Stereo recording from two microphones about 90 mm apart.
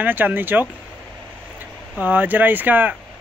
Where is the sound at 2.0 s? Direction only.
20° right (ahead or behind).